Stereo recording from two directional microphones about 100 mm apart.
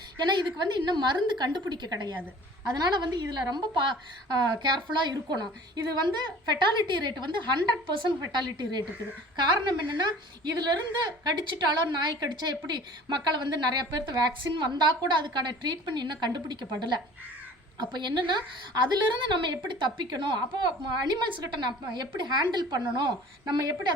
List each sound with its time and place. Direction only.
0.3 s a woman's voice: 50° right (ahead or behind)
11.5 s a woman's voice: 45° right (ahead or behind)